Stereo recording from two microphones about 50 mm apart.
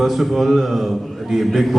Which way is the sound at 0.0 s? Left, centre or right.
Centre.